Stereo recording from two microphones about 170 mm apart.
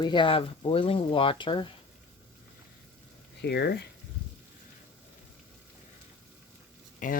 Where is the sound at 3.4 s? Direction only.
75° left (ahead or behind).